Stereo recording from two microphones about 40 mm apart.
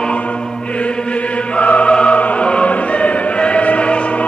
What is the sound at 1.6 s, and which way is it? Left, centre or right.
Choir, left.